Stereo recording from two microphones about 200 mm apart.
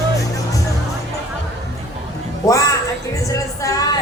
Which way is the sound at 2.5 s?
15° left (ahead or behind).